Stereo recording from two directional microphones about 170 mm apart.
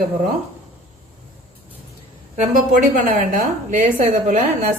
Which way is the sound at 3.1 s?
50° right (ahead or behind).